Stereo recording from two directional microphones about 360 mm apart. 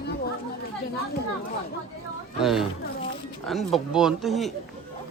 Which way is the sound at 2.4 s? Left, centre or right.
Centre.